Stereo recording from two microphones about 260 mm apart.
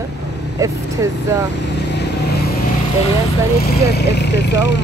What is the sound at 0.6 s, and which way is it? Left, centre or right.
Speech, centre.